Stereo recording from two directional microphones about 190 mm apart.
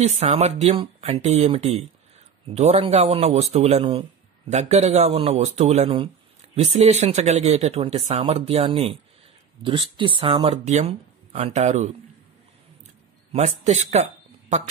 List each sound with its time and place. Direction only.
0.0 s speech: 35° right (ahead or behind)
13.3 s speech: 35° right (ahead or behind)